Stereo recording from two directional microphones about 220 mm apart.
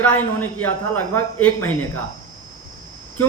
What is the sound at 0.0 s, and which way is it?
Speech, 10° left (ahead or behind).